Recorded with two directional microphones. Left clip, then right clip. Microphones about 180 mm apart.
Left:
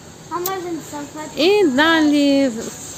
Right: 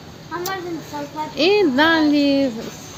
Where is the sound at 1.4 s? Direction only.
5° left (ahead or behind).